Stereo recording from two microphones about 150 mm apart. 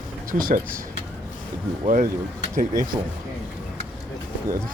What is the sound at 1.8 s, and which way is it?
Speech, 60° right (ahead or behind).